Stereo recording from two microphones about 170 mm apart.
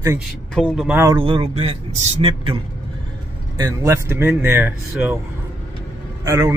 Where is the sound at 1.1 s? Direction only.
30° right (ahead or behind).